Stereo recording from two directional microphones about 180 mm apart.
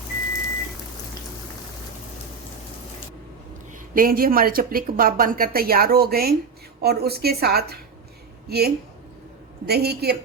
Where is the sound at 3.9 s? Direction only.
55° right (ahead or behind).